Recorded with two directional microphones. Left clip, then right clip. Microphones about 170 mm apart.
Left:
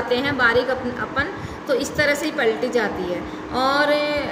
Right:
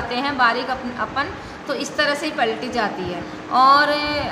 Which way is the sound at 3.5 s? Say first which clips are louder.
Right 5 dB; 40° right (ahead or behind).